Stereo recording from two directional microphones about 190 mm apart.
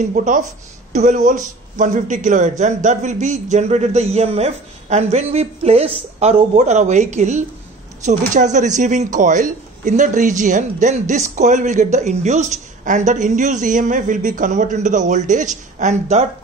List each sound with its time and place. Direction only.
0.1 s a man's voice: 45° right (ahead or behind)